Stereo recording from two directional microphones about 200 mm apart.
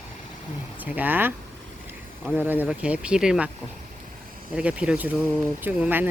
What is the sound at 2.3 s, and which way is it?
Speech, 10° right (ahead or behind).